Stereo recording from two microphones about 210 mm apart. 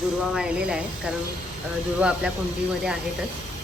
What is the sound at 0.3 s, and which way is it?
Speech, 5° right (ahead or behind).